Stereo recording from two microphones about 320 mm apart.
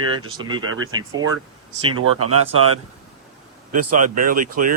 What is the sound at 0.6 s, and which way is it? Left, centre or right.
A man's voice, right.